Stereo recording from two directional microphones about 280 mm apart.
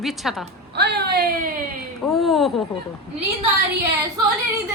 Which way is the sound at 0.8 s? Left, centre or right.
Right.